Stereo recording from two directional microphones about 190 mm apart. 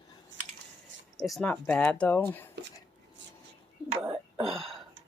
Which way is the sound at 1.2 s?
5° left (ahead or behind).